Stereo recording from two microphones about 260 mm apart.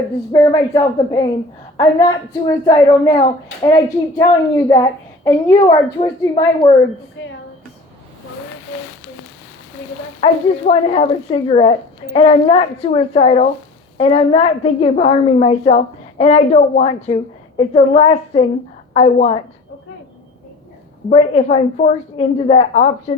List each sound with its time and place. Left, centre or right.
0.3 s a woman's voice: centre
5.5 s a woman's voice: left
6.1 s a woman's voice: centre
7.2 s speech: left
10.2 s a woman's voice: left
21.1 s a woman's voice: left